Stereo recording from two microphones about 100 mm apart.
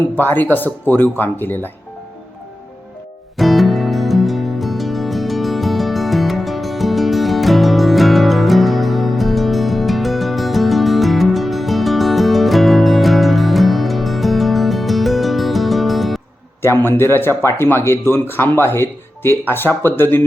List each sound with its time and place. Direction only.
0.2 s speech: 20° left (ahead or behind)
3.3 s music: centre (ahead or behind)
16.6 s speech: 25° left (ahead or behind)